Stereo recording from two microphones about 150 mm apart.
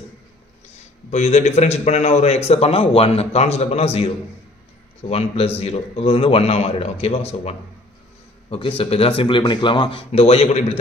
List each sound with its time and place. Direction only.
1.1 s a man's voice: 50° left (ahead or behind)
5.1 s speech: 40° left (ahead or behind)